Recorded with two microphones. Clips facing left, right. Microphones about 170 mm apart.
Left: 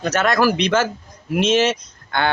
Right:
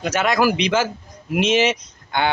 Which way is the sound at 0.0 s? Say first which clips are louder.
Left 1 dB; 10° right (ahead or behind).